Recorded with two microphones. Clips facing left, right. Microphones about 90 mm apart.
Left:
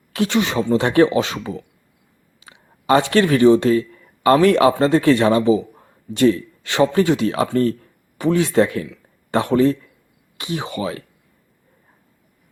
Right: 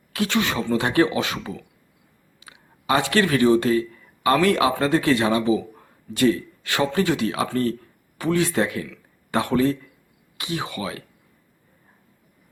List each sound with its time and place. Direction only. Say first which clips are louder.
0.1 s speech: left 4 dB; 25° left (ahead or behind)